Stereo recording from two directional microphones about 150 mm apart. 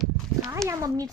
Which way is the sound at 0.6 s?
5° left (ahead or behind).